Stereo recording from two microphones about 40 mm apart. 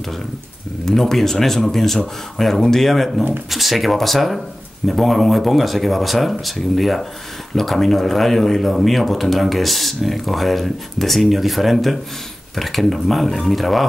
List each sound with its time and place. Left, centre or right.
0.8 s speech: centre